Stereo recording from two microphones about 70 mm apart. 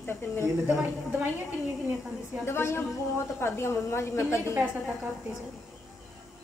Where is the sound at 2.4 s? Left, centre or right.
Left.